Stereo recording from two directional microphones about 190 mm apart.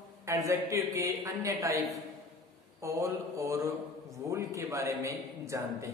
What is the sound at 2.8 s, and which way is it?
A man's voice, 15° right (ahead or behind).